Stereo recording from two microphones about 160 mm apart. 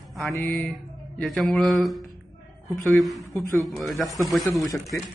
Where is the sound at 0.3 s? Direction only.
10° left (ahead or behind).